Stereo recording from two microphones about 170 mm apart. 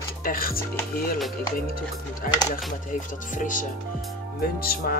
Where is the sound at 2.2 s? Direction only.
55° left (ahead or behind).